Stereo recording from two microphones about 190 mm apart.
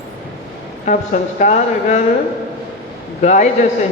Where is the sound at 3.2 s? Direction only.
40° left (ahead or behind).